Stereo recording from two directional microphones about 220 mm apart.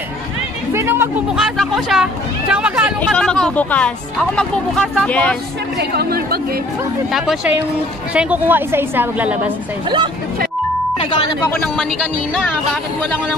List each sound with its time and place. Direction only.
0.7 s speech: 10° right (ahead or behind); by 5.4 s 5° left (ahead or behind)
5.8 s speech: 45° right (ahead or behind)
7.1 s a woman's voice: centre (ahead or behind)
11.5 s speech: 5° left (ahead or behind)